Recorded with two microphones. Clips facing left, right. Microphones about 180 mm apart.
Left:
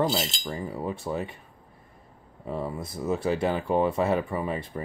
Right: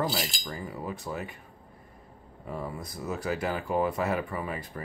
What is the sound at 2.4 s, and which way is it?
Speech, 25° left (ahead or behind).